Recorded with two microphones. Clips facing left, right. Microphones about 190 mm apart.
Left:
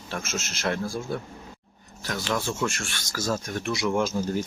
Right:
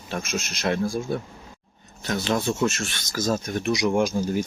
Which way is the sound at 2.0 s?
20° right (ahead or behind).